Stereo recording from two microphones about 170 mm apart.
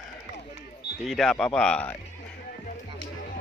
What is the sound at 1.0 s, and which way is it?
Speech, centre (ahead or behind).